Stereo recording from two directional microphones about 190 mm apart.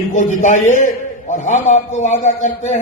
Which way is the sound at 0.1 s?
40° left (ahead or behind).